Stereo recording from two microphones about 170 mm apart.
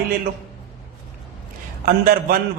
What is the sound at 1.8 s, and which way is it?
Speech, 60° right (ahead or behind).